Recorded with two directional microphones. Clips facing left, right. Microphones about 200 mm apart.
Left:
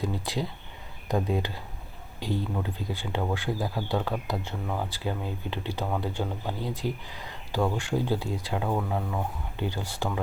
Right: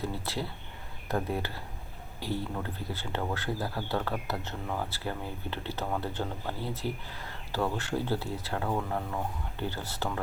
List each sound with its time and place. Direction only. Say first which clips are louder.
0.0 s speech: left 4 dB; 15° left (ahead or behind)